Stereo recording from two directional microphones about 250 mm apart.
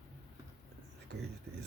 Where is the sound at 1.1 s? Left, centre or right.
Right.